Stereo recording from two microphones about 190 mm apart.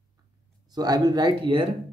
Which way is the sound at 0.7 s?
20° right (ahead or behind).